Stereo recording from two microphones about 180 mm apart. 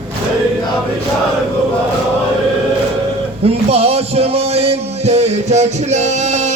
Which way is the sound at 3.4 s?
35° right (ahead or behind).